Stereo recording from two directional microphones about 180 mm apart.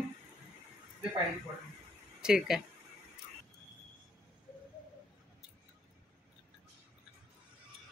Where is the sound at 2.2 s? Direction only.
Centre (ahead or behind).